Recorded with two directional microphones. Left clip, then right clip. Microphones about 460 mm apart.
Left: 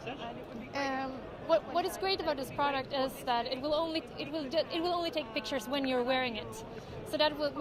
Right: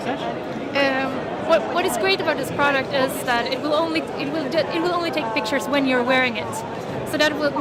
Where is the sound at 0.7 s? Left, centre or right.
Left.